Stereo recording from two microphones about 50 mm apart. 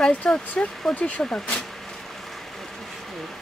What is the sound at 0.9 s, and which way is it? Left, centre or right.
Speech, left.